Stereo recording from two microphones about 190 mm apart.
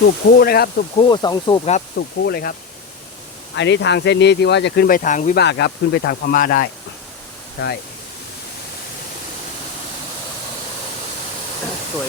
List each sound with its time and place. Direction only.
0.3 s speech: 55° left (ahead or behind)
0.9 s speech: 25° left (ahead or behind)
2.0 s speech: 55° left (ahead or behind)
3.5 s speech: 65° left (ahead or behind); by 5.4 s 40° left (ahead or behind)
5.4 s speech: 60° left (ahead or behind)
7.6 s speech: 65° left (ahead or behind)